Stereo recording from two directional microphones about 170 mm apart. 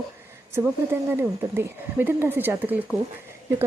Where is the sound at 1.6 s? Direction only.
10° right (ahead or behind).